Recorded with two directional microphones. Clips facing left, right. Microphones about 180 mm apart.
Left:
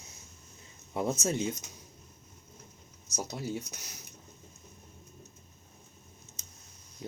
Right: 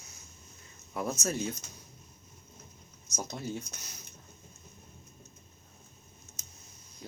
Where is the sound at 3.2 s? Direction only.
10° left (ahead or behind).